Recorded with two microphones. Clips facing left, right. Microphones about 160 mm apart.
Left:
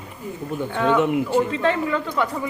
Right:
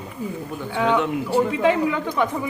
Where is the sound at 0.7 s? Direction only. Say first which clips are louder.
Left 1 dB; 15° right (ahead or behind).